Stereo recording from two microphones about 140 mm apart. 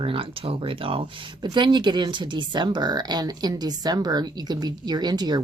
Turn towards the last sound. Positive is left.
turn(degrees=-30)  # may be behind; listen again after turning